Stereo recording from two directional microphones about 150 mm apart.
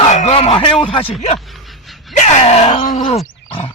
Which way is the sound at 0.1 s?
50° left (ahead or behind).